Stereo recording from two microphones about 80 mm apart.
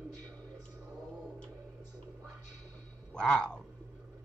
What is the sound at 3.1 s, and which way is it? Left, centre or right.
Speech, centre.